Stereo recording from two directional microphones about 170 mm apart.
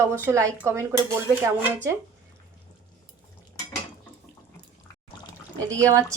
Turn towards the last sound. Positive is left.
turn(degrees=-20)  # may be behind; listen again after turning